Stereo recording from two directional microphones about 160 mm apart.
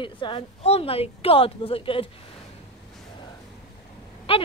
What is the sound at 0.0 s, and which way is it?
Speech, 30° left (ahead or behind).